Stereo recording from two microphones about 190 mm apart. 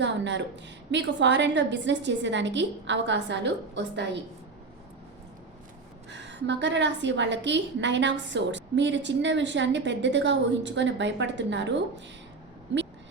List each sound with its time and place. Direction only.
0.0 s a woman's voice: 70° right (ahead or behind)
6.1 s a woman's voice: 70° right (ahead or behind)